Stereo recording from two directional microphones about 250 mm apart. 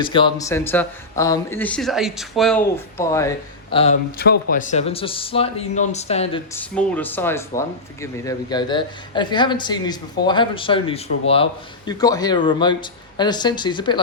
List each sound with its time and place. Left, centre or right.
0.0 s speech: centre
4.2 s speech: left
6.5 s speech: centre